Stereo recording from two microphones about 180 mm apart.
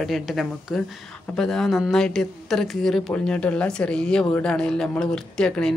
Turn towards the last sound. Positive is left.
turn(degrees=5)  # may be behind; listen again after turning